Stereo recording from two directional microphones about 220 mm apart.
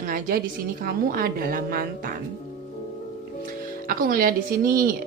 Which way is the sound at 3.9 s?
40° right (ahead or behind).